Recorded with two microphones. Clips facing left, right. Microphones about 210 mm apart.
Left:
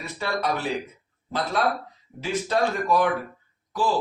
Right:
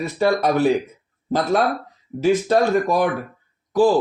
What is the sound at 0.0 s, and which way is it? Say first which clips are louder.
Speech: right 9 dB; 45° right (ahead or behind).